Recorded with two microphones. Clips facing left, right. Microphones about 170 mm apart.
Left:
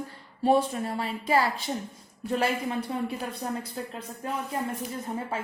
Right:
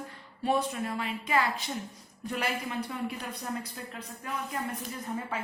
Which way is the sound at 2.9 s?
25° left (ahead or behind).